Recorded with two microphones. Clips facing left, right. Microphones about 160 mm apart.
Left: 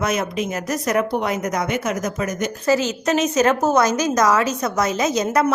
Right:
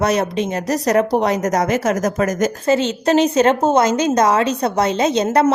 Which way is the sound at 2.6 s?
25° right (ahead or behind).